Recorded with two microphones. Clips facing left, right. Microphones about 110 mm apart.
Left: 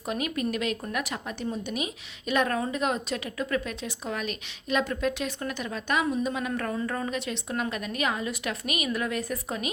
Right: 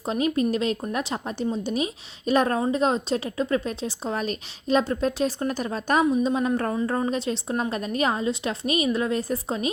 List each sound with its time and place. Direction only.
0.0 s a woman's voice: 30° right (ahead or behind)